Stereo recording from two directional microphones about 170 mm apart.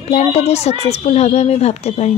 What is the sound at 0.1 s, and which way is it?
A woman's voice, 40° left (ahead or behind).